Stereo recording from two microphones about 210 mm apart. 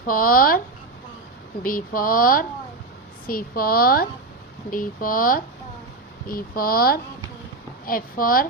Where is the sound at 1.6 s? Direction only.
40° left (ahead or behind).